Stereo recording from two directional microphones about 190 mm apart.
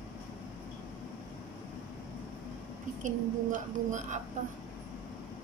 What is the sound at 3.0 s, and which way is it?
A woman's voice, 40° right (ahead or behind).